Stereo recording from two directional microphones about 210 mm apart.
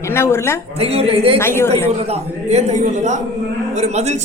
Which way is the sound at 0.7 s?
30° right (ahead or behind).